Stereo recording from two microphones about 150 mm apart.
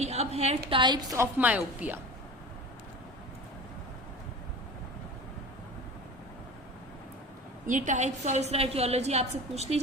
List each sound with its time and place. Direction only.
0.0 s a woman's voice: 45° right (ahead or behind)
1.1 s a woman's voice: 15° right (ahead or behind)
7.7 s a woman's voice: 55° right (ahead or behind)